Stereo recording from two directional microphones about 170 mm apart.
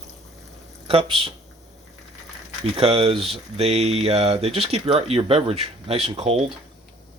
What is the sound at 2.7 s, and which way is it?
Speech, 35° right (ahead or behind).